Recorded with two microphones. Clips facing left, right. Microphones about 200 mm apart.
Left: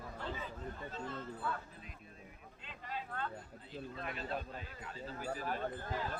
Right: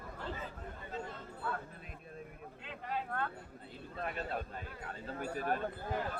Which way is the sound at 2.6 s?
55° right (ahead or behind).